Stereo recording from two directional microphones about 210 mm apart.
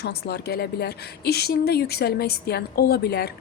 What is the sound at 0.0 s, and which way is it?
Speech, 50° left (ahead or behind).